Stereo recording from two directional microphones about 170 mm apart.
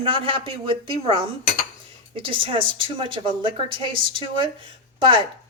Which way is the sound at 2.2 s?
30° right (ahead or behind).